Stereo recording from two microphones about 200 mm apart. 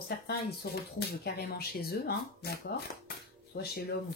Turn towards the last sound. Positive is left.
turn(degrees=50)  # may be behind; listen again after turning